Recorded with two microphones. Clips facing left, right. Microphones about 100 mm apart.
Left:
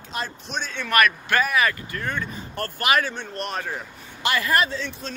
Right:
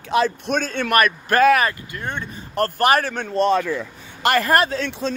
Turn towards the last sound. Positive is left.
turn(degrees=-65)  # may be behind; listen again after turning